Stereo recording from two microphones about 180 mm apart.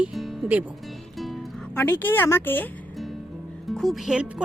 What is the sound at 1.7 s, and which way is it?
Speech, 10° left (ahead or behind).